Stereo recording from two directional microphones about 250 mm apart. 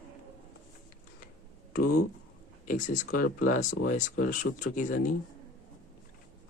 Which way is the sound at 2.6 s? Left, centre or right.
Left.